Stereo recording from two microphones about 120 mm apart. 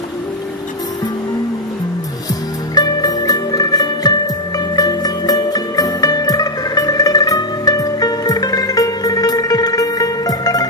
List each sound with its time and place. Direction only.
2.7 s music: 35° left (ahead or behind)